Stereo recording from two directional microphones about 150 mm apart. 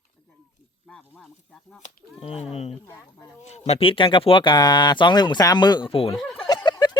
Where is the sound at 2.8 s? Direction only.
15° left (ahead or behind).